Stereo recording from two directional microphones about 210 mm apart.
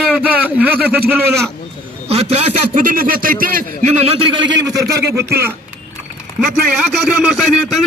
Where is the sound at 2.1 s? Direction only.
30° right (ahead or behind).